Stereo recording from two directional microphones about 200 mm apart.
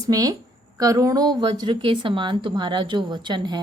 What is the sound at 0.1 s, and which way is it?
A woman's voice, 20° right (ahead or behind).